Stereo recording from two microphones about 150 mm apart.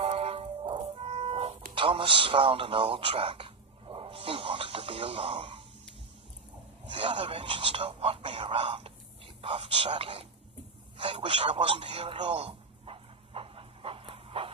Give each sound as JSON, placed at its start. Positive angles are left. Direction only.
{"t": 0.0, "sound": "music", "side_deg": -40}
{"t": 1.7, "sound": "a man's voice", "side_deg": -35}
{"t": 6.8, "sound": "speech", "side_deg": -35}
{"t": 10.9, "sound": "a sound", "side_deg": -35}